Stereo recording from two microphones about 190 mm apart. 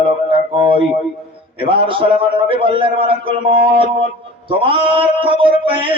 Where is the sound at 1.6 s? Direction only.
25° right (ahead or behind).